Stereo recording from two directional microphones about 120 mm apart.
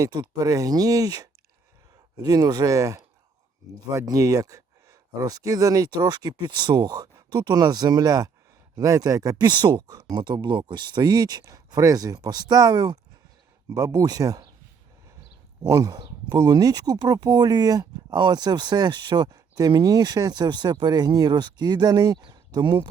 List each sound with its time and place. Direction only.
0.0 s speech: 35° right (ahead or behind)
15.6 s speech: 30° right (ahead or behind)